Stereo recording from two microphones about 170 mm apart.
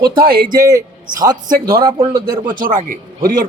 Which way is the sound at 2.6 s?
50° right (ahead or behind).